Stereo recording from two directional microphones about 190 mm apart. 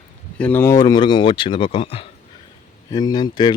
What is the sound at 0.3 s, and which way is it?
Speech, 10° left (ahead or behind).